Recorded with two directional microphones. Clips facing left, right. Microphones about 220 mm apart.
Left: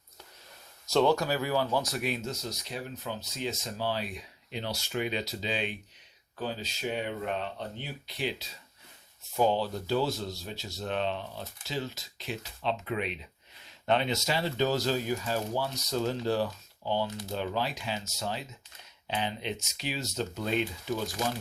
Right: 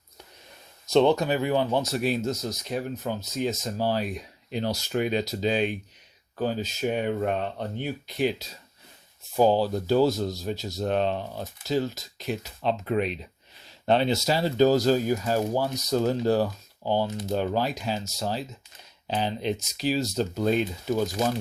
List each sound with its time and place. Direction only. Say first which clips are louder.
0.9 s speech: right 5 dB; 20° right (ahead or behind); by 21.0 s 40° right (ahead or behind)